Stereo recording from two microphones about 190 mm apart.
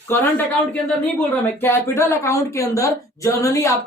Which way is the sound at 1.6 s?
10° left (ahead or behind).